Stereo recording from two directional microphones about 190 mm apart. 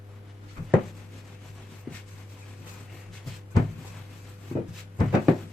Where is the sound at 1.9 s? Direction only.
Centre (ahead or behind).